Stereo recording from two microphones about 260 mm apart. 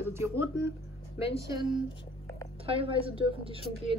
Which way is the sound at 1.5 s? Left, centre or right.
Centre.